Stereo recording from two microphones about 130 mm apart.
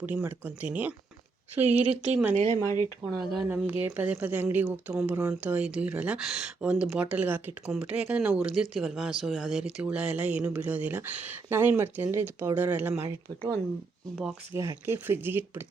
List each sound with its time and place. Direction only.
0.0 s speech: 15° right (ahead or behind)
2.3 s speech: 65° right (ahead or behind)
3.0 s speech: 5° right (ahead or behind)
14.2 s speech: 15° right (ahead or behind)